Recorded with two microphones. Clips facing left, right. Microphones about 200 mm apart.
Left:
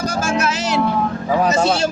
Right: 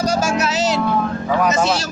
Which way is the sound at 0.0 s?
55° left (ahead or behind).